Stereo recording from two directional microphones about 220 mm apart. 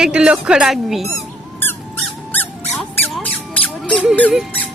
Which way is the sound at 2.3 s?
10° left (ahead or behind).